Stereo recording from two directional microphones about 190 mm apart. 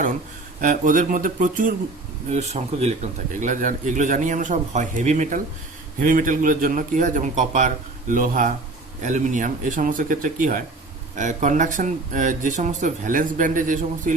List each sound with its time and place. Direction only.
0.6 s a man's voice: 45° right (ahead or behind)